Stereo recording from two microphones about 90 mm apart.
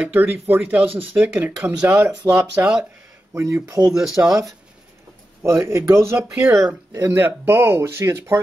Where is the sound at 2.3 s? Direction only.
30° right (ahead or behind).